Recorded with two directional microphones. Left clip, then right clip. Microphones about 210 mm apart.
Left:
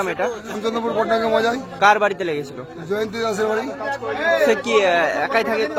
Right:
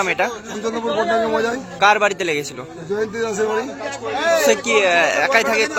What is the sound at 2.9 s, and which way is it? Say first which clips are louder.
Speech: right 1 dB; 15° left (ahead or behind).